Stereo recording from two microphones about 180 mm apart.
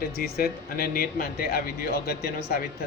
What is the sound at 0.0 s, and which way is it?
Speech, 55° left (ahead or behind).